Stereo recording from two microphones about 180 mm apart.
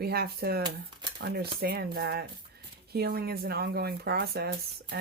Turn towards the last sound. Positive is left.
turn(degrees=-60)  # may be behind; listen again after turning